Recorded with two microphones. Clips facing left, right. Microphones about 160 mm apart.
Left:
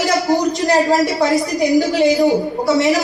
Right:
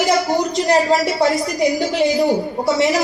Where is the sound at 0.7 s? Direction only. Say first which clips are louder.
Left 1 dB; centre (ahead or behind).